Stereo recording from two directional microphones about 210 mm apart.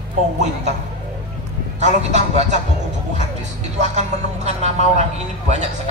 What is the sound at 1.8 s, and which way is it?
Speech, 35° right (ahead or behind).